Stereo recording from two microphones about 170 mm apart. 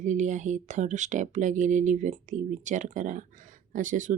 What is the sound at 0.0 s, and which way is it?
Speech, 45° right (ahead or behind).